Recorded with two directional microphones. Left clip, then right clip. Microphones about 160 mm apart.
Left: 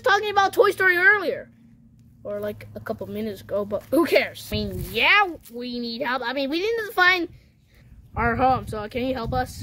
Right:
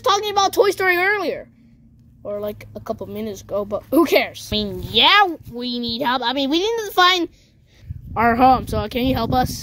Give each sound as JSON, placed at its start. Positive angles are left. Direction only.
{"t": 0.0, "sound": "speech", "side_deg": -20}
{"t": 8.1, "sound": "speech", "side_deg": -40}